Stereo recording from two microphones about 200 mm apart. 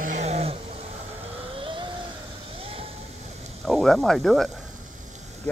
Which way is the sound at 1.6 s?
25° right (ahead or behind).